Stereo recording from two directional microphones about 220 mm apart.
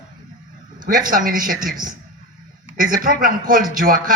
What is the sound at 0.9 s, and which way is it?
Speech, 40° right (ahead or behind).